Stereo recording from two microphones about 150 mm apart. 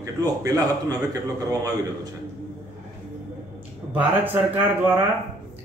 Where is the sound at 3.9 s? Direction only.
10° right (ahead or behind).